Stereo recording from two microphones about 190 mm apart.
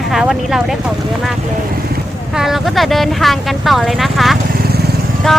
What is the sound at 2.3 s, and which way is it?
Speech, centre (ahead or behind).